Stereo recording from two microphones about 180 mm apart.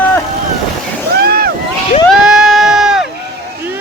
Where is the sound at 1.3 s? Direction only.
60° right (ahead or behind).